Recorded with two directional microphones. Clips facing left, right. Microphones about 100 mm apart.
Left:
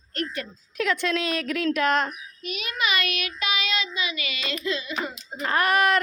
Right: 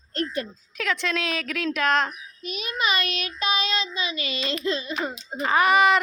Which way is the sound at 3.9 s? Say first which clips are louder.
Right 2 dB; 30° right (ahead or behind).